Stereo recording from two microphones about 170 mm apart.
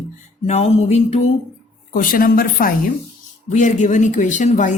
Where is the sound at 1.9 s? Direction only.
55° left (ahead or behind).